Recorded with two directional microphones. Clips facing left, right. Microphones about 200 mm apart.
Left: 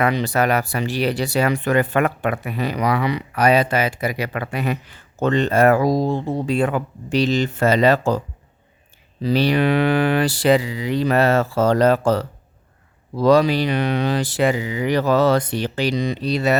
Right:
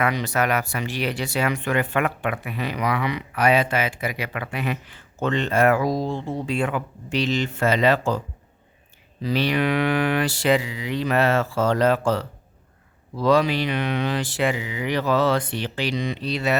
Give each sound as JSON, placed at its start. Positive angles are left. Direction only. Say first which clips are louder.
{"t": 0.0, "sound": "speech", "louder": "left 4 dB", "side_deg": 30}
{"t": 9.2, "sound": "speech", "louder": "left 4 dB", "side_deg": 35}